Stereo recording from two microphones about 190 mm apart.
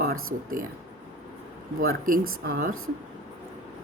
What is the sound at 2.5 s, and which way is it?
Speech, 50° right (ahead or behind).